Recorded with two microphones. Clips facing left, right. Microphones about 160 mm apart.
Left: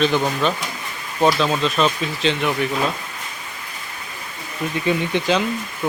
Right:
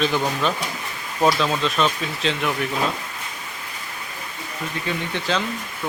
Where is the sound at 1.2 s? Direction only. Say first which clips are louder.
Left 2 dB; centre (ahead or behind).